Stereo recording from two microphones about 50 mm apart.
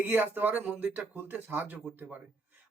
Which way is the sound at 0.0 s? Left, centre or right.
Right.